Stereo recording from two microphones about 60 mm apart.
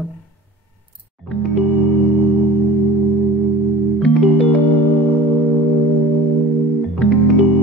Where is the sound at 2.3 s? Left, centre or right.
Left.